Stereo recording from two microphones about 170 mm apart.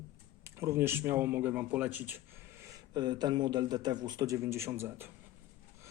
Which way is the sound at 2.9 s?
25° right (ahead or behind).